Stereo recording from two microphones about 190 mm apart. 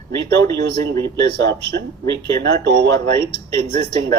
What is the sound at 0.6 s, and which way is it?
Speech, 65° right (ahead or behind).